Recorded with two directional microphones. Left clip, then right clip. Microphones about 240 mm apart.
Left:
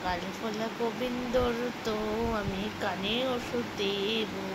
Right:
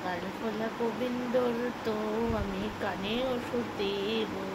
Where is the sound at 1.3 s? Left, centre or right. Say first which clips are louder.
Left 1 dB; centre.